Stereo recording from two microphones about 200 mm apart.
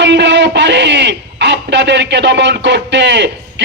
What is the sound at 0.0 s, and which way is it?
A man's voice, 60° right (ahead or behind).